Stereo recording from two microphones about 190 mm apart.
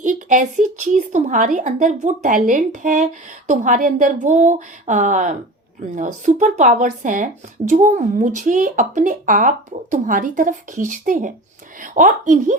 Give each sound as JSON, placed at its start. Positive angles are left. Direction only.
{"t": 0.0, "sound": "a woman's voice", "side_deg": -45}